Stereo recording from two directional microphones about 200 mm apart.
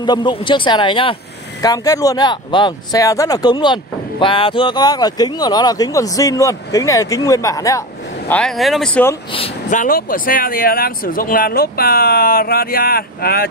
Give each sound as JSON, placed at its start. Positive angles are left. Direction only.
{"t": 0.0, "sound": "speech", "side_deg": 20}
{"t": 8.3, "sound": "speech", "side_deg": 5}
{"t": 9.7, "sound": "speech", "side_deg": 40}